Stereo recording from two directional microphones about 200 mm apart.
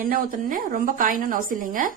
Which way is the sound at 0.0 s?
45° right (ahead or behind).